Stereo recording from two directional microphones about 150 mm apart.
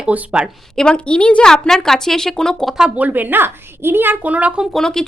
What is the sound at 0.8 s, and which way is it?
A woman's voice, 5° left (ahead or behind).